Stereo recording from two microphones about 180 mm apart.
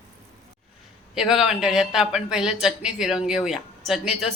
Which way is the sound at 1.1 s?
Centre (ahead or behind).